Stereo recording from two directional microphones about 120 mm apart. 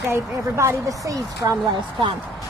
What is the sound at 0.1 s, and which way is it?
Speech, 20° right (ahead or behind).